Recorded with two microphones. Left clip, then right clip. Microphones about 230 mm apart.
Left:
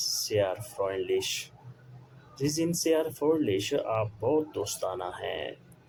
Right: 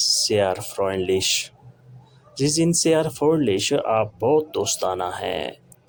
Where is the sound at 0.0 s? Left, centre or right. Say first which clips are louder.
Right 8 dB; right.